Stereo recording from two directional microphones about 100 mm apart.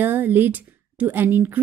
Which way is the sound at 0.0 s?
20° right (ahead or behind).